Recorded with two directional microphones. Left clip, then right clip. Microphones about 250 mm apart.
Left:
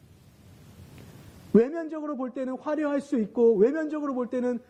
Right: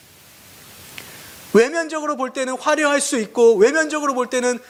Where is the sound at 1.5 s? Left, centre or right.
Centre.